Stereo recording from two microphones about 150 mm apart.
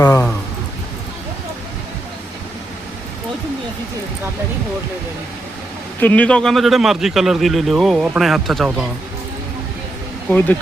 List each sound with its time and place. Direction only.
0.0 s speech: 20° left (ahead or behind)
6.0 s a man's voice: 10° left (ahead or behind)
10.2 s speech: 10° left (ahead or behind)